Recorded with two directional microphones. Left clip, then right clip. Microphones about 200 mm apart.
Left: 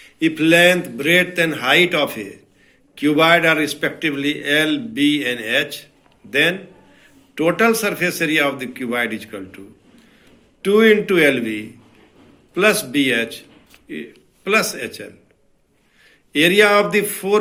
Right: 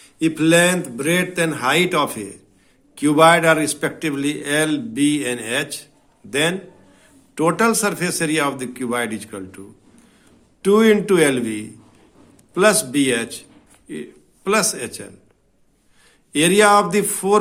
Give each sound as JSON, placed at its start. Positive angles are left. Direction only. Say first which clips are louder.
{"t": 0.0, "sound": "a man's voice", "louder": "left 1 dB", "side_deg": -50}
{"t": 10.6, "sound": "a man's voice", "louder": "left 1 dB", "side_deg": -55}
{"t": 16.3, "sound": "a man's voice", "louder": "even", "side_deg": -50}